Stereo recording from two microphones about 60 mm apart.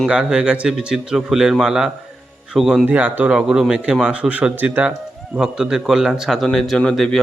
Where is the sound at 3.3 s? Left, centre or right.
Centre.